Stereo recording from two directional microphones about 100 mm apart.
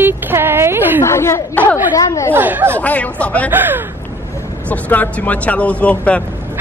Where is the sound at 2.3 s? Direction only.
20° right (ahead or behind).